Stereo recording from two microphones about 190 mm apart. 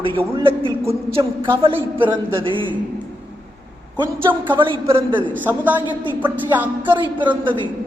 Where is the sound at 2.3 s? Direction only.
25° right (ahead or behind).